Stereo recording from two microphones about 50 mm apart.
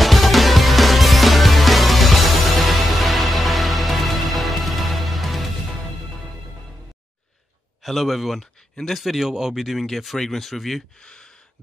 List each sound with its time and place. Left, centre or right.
0.0 s music: centre
7.8 s speech: centre
11.0 s gasp: centre